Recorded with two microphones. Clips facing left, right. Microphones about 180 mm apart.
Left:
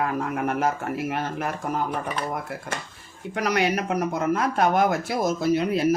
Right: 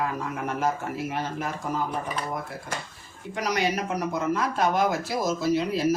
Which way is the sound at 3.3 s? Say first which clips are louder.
Left 3 dB; 60° left (ahead or behind).